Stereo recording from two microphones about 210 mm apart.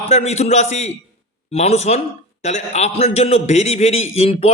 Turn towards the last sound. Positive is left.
turn(degrees=30)  # may be behind; listen again after turning